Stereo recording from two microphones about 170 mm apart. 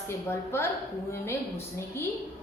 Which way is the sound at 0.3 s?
15° left (ahead or behind).